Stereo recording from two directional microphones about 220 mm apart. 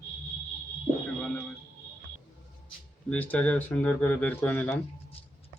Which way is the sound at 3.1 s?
5° left (ahead or behind).